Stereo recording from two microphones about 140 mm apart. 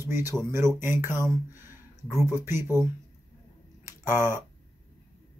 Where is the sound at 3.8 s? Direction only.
15° right (ahead or behind).